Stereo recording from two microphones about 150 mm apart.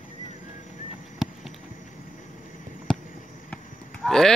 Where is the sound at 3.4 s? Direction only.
5° left (ahead or behind).